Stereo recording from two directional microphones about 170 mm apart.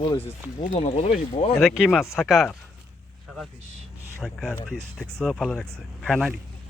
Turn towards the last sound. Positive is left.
turn(degrees=0)  # may be behind; listen again after turning